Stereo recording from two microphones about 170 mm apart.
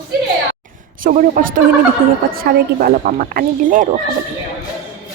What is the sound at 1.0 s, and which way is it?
A woman's voice, 55° right (ahead or behind).